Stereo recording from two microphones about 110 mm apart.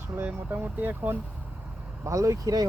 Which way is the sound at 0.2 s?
15° right (ahead or behind).